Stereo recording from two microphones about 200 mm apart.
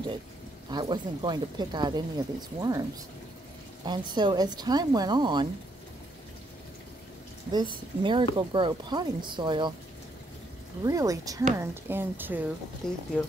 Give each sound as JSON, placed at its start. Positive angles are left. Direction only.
{"t": 0.7, "sound": "speech", "side_deg": -20}
{"t": 3.8, "sound": "speech", "side_deg": -20}
{"t": 7.5, "sound": "speech", "side_deg": -25}
{"t": 10.8, "sound": "speech", "side_deg": -15}